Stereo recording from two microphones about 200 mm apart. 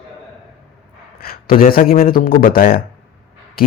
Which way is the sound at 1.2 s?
50° left (ahead or behind).